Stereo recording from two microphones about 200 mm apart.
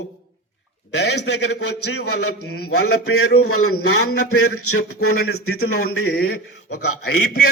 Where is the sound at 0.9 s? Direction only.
55° left (ahead or behind); by 6.1 s 90° left.